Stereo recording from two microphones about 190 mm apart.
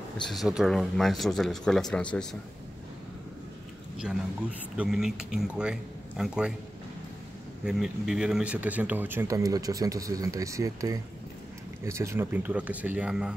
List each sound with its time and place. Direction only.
0.3 s speech: centre (ahead or behind)
4.0 s speech: 5° right (ahead or behind)
7.6 s speech: 5° right (ahead or behind)